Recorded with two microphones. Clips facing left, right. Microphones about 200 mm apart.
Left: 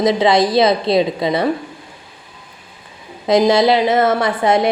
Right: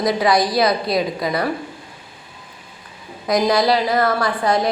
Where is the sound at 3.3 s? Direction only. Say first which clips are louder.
Left 4 dB; 25° left (ahead or behind).